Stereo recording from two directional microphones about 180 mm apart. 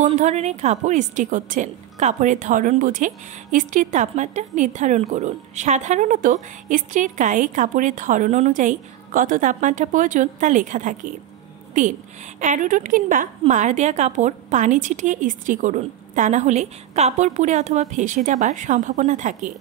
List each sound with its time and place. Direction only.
0.0 s a woman's voice: 40° right (ahead or behind)